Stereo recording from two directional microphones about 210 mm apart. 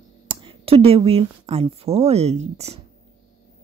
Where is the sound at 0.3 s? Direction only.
25° right (ahead or behind).